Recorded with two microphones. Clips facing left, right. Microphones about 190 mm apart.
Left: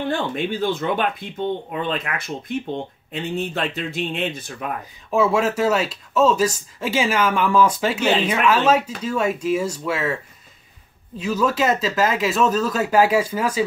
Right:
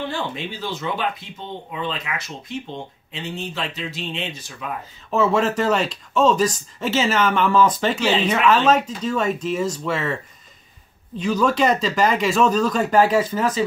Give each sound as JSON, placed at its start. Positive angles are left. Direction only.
{"t": 0.1, "sound": "speech", "side_deg": 55}
{"t": 5.1, "sound": "speech", "side_deg": 10}
{"t": 11.1, "sound": "speech", "side_deg": 5}